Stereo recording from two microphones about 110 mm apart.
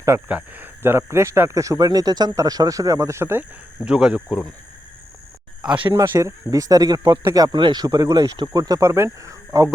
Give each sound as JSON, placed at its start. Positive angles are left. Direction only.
{"t": 0.3, "sound": "speech", "side_deg": -15}
{"t": 3.8, "sound": "speech", "side_deg": -10}
{"t": 5.9, "sound": "speech", "side_deg": -25}